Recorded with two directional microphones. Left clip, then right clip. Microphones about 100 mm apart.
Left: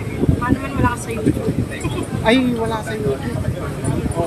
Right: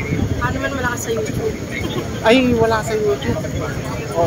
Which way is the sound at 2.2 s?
15° left (ahead or behind).